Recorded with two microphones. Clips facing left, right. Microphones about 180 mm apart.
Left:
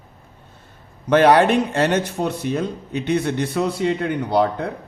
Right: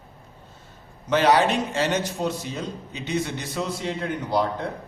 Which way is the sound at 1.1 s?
55° left (ahead or behind).